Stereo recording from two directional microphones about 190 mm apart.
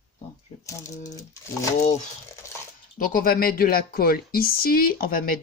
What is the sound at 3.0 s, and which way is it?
Speech, 50° left (ahead or behind).